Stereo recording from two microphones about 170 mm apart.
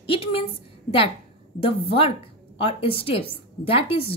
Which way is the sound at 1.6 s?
35° left (ahead or behind).